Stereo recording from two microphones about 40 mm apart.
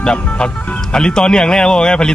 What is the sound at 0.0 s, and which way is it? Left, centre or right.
Speech, left.